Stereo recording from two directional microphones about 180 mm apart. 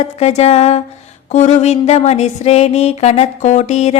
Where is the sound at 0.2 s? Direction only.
35° left (ahead or behind).